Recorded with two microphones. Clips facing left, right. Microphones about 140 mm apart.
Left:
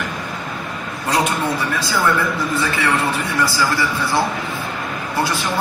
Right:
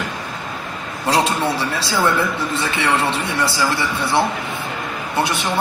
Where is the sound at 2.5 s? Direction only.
25° right (ahead or behind).